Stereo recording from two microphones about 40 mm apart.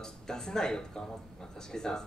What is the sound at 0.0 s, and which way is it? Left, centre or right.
Speech, centre.